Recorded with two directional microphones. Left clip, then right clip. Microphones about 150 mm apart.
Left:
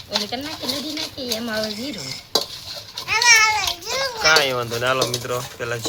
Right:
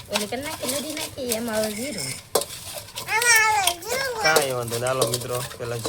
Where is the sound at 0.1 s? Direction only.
30° right (ahead or behind).